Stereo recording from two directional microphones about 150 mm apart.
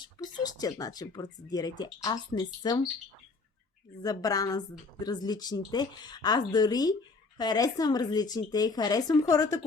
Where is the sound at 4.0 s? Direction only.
25° left (ahead or behind).